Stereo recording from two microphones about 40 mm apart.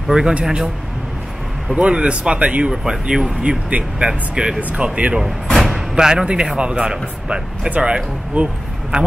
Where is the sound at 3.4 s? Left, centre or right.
Right.